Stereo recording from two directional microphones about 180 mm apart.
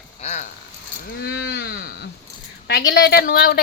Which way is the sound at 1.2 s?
75° left (ahead or behind).